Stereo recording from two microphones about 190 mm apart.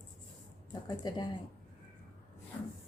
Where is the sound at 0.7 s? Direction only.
20° left (ahead or behind).